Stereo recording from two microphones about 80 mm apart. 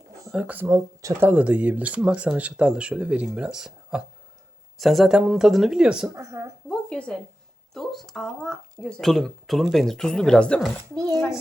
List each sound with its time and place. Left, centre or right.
0.3 s speech: centre
0.6 s speech: right
1.3 s speech: centre
5.1 s speech: centre
6.1 s a woman's voice: right
6.7 s speech: centre